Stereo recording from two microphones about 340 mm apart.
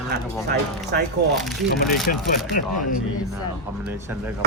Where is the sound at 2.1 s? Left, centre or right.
Left.